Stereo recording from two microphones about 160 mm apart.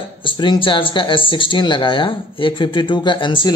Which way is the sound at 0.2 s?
30° left (ahead or behind).